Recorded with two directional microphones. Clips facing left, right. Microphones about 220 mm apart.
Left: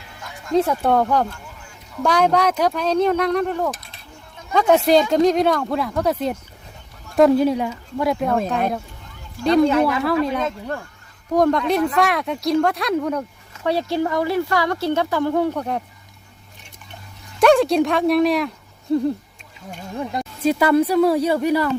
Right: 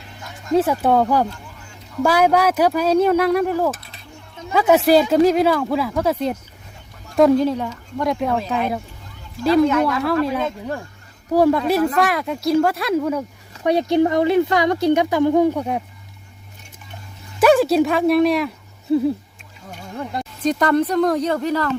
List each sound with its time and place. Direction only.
0.5 s speech: 5° right (ahead or behind)
7.4 s speech: 10° left (ahead or behind)
9.4 s speech: 5° right (ahead or behind)
13.6 s speech: 15° right (ahead or behind)
17.4 s speech: 5° right (ahead or behind)